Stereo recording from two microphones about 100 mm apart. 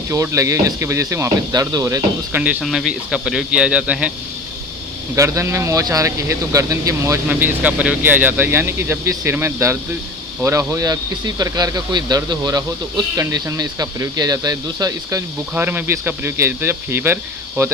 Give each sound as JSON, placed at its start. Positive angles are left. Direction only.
{"t": 0.1, "sound": "speech", "side_deg": -30}
{"t": 2.3, "sound": "speech", "side_deg": -15}
{"t": 2.6, "sound": "speech", "side_deg": -5}
{"t": 5.1, "sound": "speech", "side_deg": -30}
{"t": 7.3, "sound": "speech", "side_deg": -15}
{"t": 15.5, "sound": "speech", "side_deg": -20}